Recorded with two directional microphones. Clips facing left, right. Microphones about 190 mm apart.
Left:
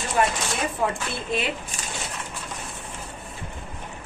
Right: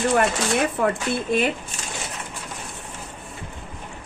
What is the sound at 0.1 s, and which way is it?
Speech, 65° right (ahead or behind).